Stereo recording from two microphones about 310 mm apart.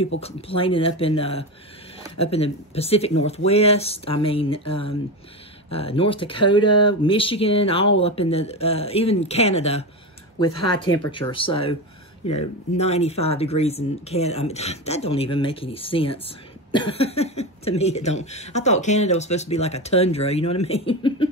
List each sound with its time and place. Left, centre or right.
0.2 s speech: centre
11.1 s speech: centre